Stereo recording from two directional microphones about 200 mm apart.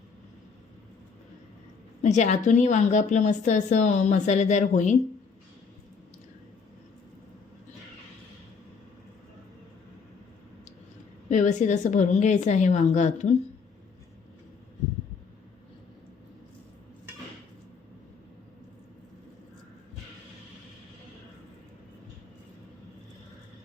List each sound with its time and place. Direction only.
2.0 s a woman's voice: 35° left (ahead or behind)
11.3 s a woman's voice: 40° left (ahead or behind)